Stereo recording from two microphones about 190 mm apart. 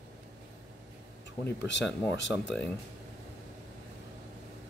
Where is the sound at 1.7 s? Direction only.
70° left (ahead or behind).